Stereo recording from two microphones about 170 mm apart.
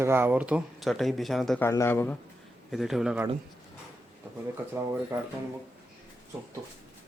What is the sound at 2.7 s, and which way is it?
Speech, centre (ahead or behind).